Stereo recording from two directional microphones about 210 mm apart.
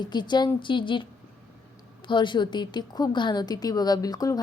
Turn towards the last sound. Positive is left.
turn(degrees=15)  # may be behind; listen again after turning